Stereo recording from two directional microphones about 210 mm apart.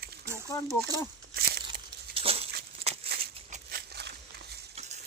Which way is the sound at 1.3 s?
50° right (ahead or behind).